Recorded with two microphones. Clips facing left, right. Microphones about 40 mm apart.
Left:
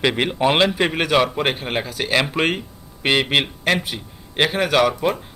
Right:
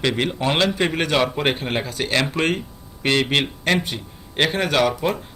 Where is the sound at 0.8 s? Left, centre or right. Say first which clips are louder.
Left 2 dB; centre.